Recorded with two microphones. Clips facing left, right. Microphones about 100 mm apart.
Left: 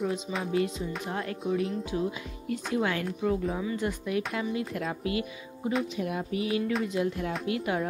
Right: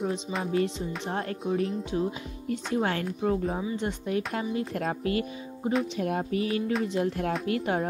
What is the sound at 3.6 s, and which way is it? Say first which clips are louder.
Speech: even; 25° right (ahead or behind).